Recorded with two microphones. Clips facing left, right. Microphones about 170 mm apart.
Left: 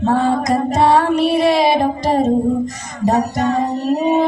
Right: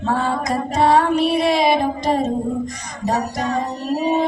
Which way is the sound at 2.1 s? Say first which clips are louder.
Left 4 dB; 40° left (ahead or behind).